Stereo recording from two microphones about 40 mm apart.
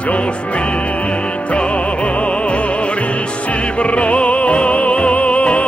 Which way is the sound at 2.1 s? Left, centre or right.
Left.